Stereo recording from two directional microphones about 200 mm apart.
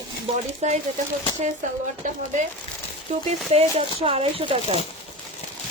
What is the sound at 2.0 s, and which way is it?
Speech, 40° right (ahead or behind).